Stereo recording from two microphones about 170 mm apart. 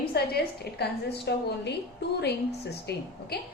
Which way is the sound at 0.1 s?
70° left (ahead or behind).